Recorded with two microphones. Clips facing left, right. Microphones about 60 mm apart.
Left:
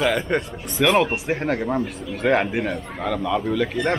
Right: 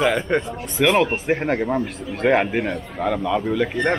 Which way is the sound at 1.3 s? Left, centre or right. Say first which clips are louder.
Right 2 dB; centre.